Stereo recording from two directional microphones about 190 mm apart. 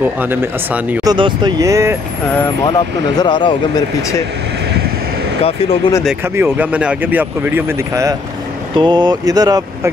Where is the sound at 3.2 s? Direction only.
25° left (ahead or behind).